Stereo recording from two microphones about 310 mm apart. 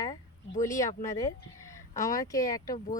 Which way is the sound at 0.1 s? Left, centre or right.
Left.